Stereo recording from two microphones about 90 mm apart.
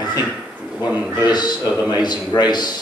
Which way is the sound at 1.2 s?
50° left (ahead or behind).